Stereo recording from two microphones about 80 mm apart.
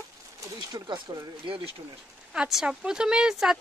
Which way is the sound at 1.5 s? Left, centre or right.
Right.